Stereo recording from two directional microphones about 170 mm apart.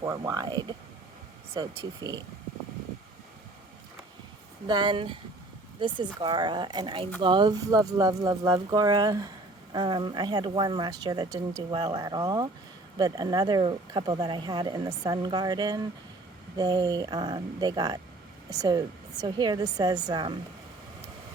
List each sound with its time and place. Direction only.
0.0 s speech: 20° right (ahead or behind)
4.6 s speech: 25° right (ahead or behind)